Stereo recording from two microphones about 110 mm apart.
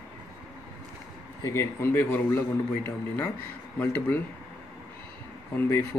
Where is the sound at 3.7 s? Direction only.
15° left (ahead or behind).